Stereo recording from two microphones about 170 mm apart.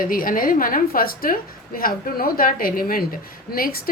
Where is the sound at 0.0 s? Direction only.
55° left (ahead or behind).